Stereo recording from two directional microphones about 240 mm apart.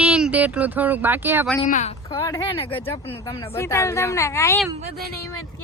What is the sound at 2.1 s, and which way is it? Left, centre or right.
A woman's voice, centre.